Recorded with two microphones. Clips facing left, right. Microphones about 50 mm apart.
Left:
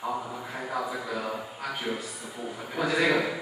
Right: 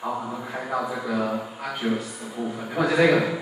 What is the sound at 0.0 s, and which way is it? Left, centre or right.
A man's voice, centre.